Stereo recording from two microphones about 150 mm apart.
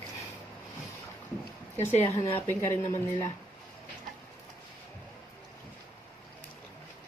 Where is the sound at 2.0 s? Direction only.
15° left (ahead or behind).